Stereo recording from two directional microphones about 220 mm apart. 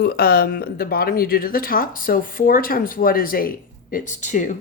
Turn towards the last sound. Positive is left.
turn(degrees=35)  # may be behind; listen again after turning